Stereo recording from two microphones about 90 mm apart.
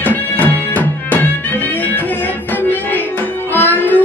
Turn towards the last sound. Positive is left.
turn(degrees=20)  # may be behind; listen again after turning